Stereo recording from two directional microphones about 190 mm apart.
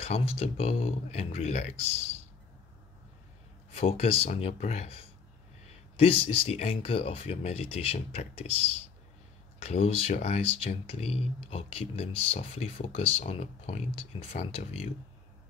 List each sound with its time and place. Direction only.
0.0 s speech: 35° left (ahead or behind)
3.7 s speech: 35° left (ahead or behind)